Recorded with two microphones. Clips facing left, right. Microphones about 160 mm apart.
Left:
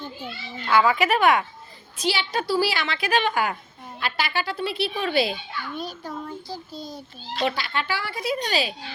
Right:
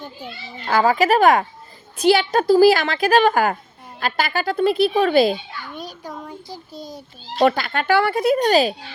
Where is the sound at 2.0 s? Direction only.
55° right (ahead or behind).